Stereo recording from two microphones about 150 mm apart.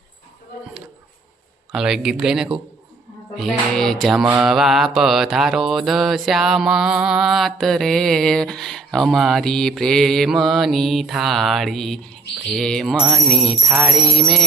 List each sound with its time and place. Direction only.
1.7 s mantra: 5° right (ahead or behind)